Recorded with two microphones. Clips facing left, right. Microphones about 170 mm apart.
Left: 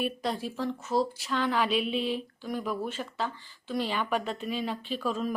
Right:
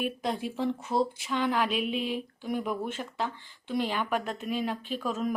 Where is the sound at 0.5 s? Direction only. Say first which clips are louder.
Even; 20° right (ahead or behind).